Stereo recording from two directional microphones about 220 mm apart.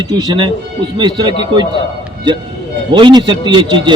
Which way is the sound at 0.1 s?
20° right (ahead or behind).